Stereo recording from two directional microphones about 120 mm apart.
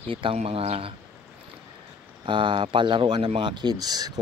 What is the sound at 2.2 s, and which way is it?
Speech, 45° right (ahead or behind).